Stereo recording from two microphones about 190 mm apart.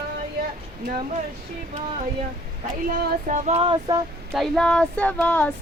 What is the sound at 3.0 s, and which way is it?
Female singing, 40° right (ahead or behind).